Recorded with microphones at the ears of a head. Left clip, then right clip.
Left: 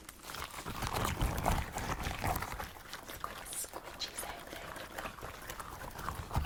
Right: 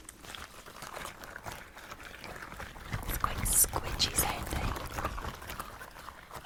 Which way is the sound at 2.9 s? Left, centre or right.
Right.